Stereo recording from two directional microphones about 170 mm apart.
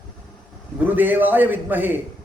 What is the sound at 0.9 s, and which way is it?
Speech, 10° right (ahead or behind).